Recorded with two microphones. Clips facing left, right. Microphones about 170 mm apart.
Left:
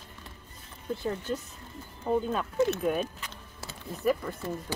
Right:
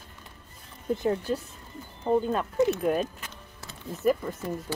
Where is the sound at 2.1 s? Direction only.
20° right (ahead or behind).